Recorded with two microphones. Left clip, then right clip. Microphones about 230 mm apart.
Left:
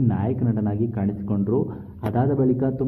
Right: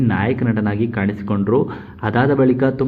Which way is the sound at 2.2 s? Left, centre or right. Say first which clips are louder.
Right 7 dB; right.